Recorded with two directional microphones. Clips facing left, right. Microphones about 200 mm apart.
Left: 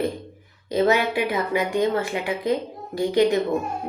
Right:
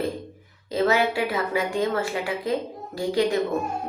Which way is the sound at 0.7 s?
20° left (ahead or behind).